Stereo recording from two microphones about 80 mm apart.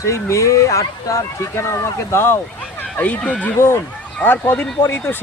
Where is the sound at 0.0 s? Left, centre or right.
Left.